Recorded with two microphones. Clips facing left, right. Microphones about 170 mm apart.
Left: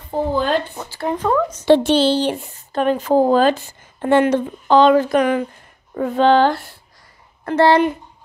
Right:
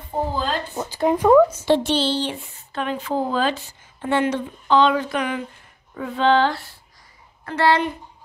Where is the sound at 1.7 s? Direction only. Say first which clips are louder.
Left 6 dB; 55° left (ahead or behind).